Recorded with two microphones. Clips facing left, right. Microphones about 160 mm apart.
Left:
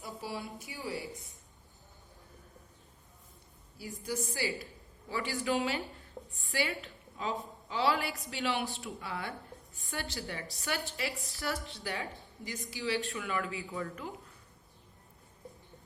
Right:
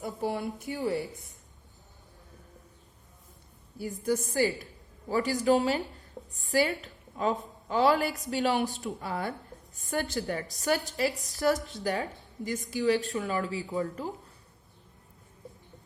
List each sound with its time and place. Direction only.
0.0 s a woman's voice: 55° right (ahead or behind)
4.0 s a woman's voice: 50° right (ahead or behind); by 14.3 s 35° right (ahead or behind)